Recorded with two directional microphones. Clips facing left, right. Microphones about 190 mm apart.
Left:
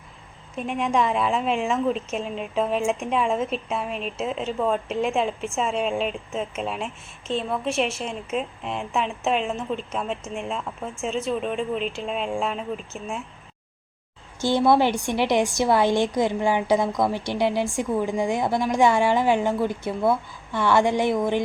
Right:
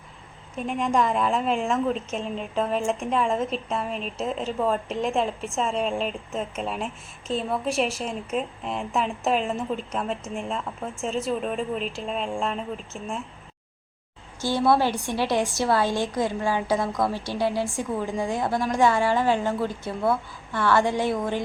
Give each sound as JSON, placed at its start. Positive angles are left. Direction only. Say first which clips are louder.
{"t": 0.5, "sound": "speech", "louder": "even", "side_deg": 0}
{"t": 14.4, "sound": "a woman's voice", "louder": "left 2 dB", "side_deg": 20}